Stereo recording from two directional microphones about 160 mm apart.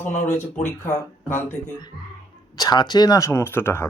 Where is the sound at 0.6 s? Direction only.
15° left (ahead or behind).